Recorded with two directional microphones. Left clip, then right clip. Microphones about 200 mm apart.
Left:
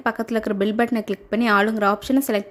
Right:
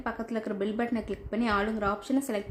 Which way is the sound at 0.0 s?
40° left (ahead or behind).